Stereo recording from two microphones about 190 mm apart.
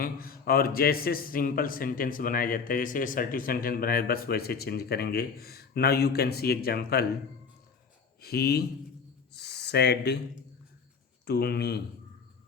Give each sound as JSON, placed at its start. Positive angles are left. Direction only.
{"t": 0.0, "sound": "a man's voice", "side_deg": 50}
{"t": 8.2, "sound": "speech", "side_deg": 55}
{"t": 9.3, "sound": "a sound", "side_deg": 60}
{"t": 11.3, "sound": "speech", "side_deg": 60}